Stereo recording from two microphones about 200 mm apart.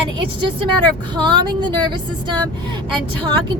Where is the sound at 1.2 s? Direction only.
25° right (ahead or behind).